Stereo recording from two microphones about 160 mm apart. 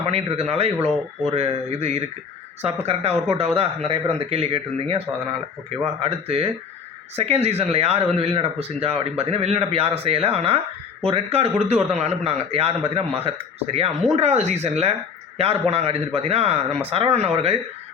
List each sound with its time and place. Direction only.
0.0 s speech: 40° right (ahead or behind)